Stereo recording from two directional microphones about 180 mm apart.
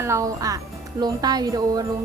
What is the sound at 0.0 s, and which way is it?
A woman's voice, 15° right (ahead or behind).